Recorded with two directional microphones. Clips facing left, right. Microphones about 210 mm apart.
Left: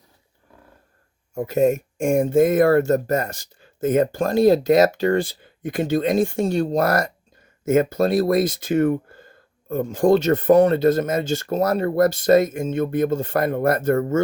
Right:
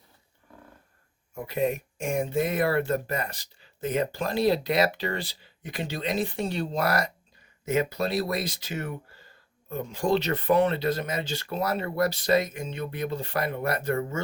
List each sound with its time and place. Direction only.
1.4 s speech: 45° left (ahead or behind)